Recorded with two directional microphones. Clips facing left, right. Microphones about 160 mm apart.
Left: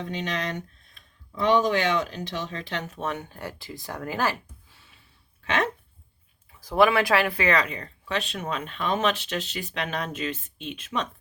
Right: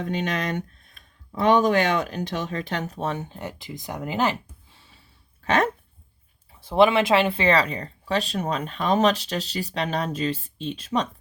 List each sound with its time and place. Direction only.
0.0 s speech: 50° right (ahead or behind); by 4.8 s 20° right (ahead or behind)
5.5 s speech: 40° right (ahead or behind)
6.5 s speech: 25° right (ahead or behind)